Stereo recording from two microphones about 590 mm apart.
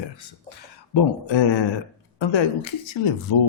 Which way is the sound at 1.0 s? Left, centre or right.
Left.